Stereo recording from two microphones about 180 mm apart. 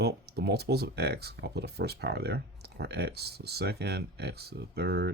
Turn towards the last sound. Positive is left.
turn(degrees=-65)  # may be behind; listen again after turning